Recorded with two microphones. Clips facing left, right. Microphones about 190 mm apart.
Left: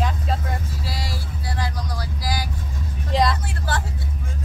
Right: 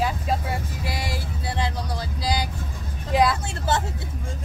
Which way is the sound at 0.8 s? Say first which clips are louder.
Right 3 dB; 20° right (ahead or behind).